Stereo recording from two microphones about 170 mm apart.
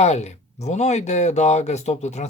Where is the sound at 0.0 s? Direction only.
40° left (ahead or behind).